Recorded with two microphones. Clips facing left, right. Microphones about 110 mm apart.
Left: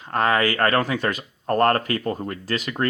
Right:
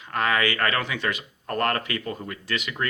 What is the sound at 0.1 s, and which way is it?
Speech, 35° left (ahead or behind).